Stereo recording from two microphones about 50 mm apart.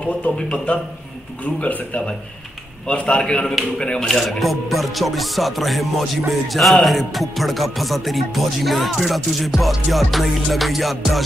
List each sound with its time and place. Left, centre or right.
0.7 s a man's voice: left
4.1 s music: centre